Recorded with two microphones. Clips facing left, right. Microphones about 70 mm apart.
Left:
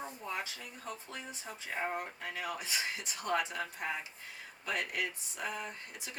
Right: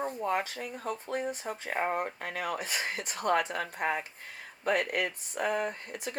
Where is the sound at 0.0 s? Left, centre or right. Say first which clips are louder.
Right 9 dB; right.